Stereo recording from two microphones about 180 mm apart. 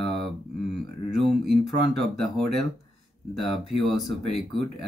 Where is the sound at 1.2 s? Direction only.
Centre (ahead or behind).